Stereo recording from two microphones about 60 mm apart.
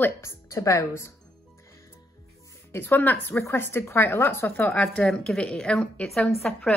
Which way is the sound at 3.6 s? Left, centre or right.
Left.